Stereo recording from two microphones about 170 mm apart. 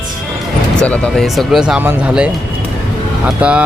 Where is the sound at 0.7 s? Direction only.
5° left (ahead or behind).